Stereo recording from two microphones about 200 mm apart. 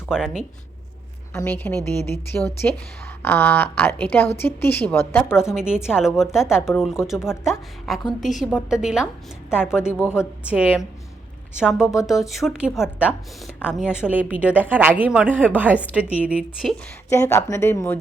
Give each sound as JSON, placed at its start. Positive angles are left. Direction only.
{"t": 0.1, "sound": "a woman's voice", "side_deg": -5}
{"t": 1.3, "sound": "speech", "side_deg": 10}
{"t": 5.4, "sound": "a woman's voice", "side_deg": -5}
{"t": 17.1, "sound": "speech", "side_deg": 15}